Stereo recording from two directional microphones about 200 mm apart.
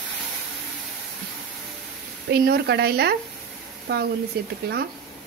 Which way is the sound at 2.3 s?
50° right (ahead or behind).